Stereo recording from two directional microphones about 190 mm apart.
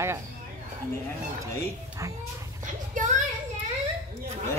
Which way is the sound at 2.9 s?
40° right (ahead or behind).